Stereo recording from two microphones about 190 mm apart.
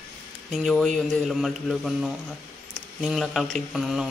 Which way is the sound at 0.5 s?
Centre (ahead or behind).